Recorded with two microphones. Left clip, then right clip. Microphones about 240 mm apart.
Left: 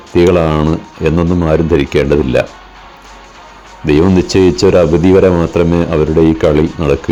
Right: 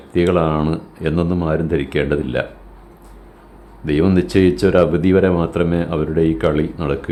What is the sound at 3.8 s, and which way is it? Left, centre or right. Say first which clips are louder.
Speech: left 7 dB; left.